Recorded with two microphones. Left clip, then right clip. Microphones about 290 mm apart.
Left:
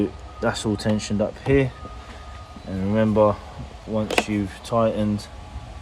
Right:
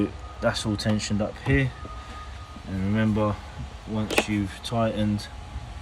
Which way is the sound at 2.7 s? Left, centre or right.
Centre.